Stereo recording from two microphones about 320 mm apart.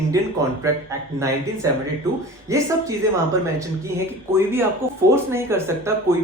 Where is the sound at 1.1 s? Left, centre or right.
Centre.